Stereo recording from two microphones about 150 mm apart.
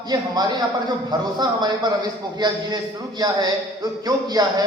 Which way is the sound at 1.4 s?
30° right (ahead or behind).